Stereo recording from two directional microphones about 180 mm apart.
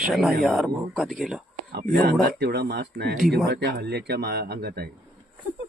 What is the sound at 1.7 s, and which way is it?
Speech, 65° right (ahead or behind).